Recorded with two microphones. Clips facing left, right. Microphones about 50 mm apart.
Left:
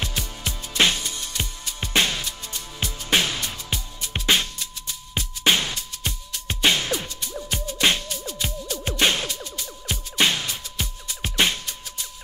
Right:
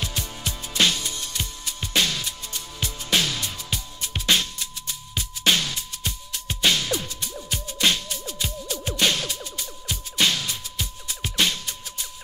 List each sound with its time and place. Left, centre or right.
0.0 s music: left